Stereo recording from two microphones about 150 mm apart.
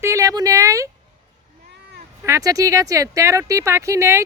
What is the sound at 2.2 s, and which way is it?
Speech, 20° right (ahead or behind).